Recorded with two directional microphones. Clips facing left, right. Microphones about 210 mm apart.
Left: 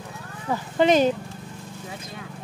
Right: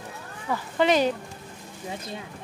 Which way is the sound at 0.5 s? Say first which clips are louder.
Left 3 dB; 20° left (ahead or behind).